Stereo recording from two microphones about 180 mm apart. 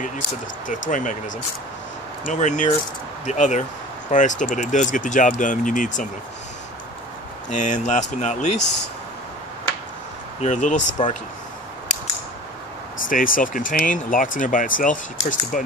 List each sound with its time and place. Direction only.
0.7 s speech: 45° left (ahead or behind)
2.2 s speech: 45° left (ahead or behind)
7.4 s speech: 45° left (ahead or behind)
8.5 s speech: 75° left (ahead or behind)
10.4 s speech: 45° left (ahead or behind)
13.0 s speech: 50° left (ahead or behind)